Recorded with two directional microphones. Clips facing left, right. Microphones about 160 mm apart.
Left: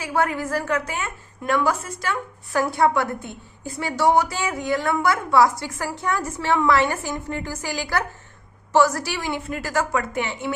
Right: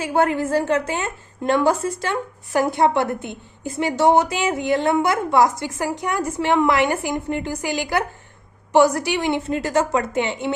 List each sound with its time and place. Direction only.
0.0 s a woman's voice: 25° right (ahead or behind)